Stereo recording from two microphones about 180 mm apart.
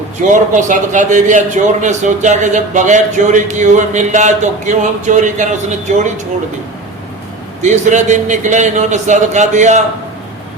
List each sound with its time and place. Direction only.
0.3 s a man's voice: 45° right (ahead or behind)
7.6 s a man's voice: 40° right (ahead or behind)